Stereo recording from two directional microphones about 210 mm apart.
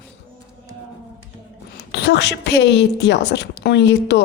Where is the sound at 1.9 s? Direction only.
50° left (ahead or behind).